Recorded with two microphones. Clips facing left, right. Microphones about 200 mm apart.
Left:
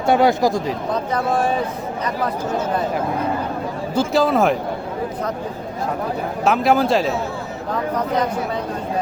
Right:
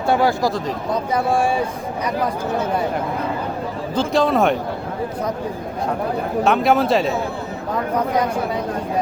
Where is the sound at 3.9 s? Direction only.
5° left (ahead or behind).